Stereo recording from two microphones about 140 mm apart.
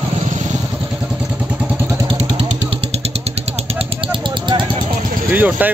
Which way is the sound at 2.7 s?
45° right (ahead or behind).